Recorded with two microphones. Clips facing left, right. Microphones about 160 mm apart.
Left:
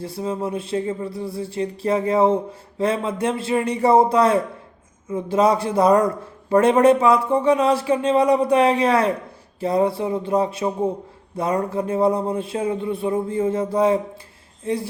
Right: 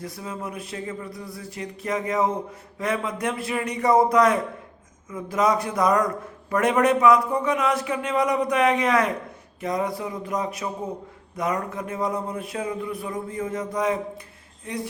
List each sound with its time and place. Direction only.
0.0 s a man's voice: 30° left (ahead or behind)